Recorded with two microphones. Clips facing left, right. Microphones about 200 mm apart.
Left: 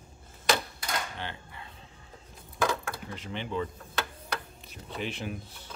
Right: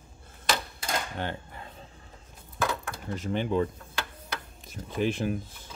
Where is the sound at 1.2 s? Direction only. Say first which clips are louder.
Right 6 dB; 45° right (ahead or behind).